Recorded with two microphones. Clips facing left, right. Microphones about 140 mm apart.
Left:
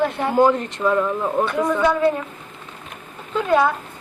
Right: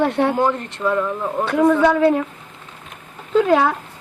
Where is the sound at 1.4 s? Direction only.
80° right.